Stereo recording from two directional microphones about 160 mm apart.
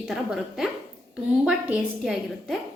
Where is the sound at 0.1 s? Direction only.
Centre (ahead or behind).